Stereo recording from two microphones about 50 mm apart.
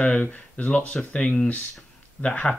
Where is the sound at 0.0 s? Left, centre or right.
Left.